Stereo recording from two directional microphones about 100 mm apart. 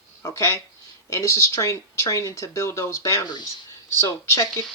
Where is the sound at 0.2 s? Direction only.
25° left (ahead or behind).